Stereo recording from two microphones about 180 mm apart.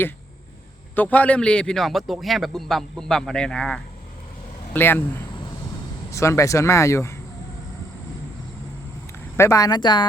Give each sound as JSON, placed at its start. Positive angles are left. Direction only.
{"t": 0.9, "sound": "a man's voice", "side_deg": 10}
{"t": 6.1, "sound": "speech", "side_deg": 15}
{"t": 9.4, "sound": "speech", "side_deg": 20}